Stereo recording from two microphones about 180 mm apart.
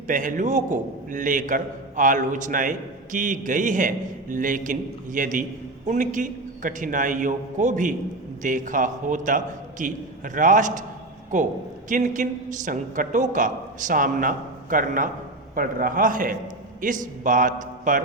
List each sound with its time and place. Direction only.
0.1 s a man's voice: 45° right (ahead or behind)